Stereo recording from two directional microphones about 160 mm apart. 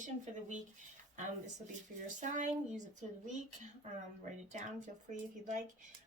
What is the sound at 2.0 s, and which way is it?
Speech, 50° right (ahead or behind).